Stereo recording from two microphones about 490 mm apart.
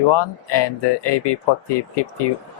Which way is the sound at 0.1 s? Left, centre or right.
Left.